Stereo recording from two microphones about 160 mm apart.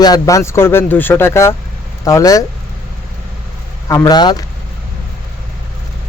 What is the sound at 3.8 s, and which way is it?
Speech, 25° left (ahead or behind).